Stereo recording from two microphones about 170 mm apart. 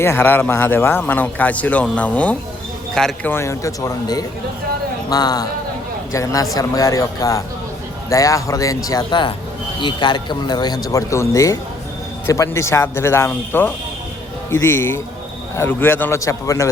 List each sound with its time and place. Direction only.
0.0 s a man's voice: 15° left (ahead or behind)
3.3 s a man's voice: 15° left (ahead or behind)